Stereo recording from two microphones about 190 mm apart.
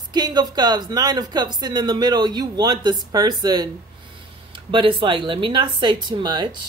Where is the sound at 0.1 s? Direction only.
20° right (ahead or behind).